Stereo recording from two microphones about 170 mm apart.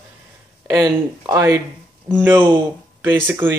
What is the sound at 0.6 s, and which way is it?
Speech, 15° right (ahead or behind).